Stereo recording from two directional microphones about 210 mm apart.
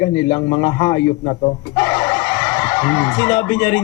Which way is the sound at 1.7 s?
10° left (ahead or behind).